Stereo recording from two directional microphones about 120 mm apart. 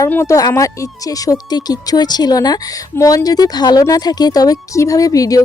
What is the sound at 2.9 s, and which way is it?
A woman's voice, 25° left (ahead or behind).